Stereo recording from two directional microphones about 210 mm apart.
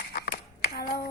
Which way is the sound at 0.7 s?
45° left (ahead or behind).